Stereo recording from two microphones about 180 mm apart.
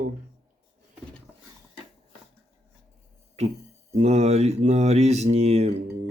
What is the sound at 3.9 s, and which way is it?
Speech, 35° right (ahead or behind).